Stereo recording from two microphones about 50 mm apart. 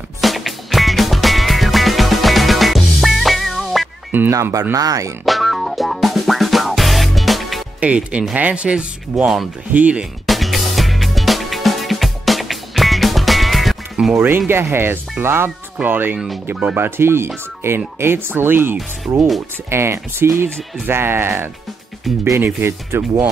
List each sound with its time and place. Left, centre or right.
0.2 s music: centre
4.3 s speech: right
5.2 s music: centre
7.8 s speech: right
9.1 s speech: right
10.2 s music: centre
14.1 s speech: right
22.1 s speech: centre
22.4 s speech: right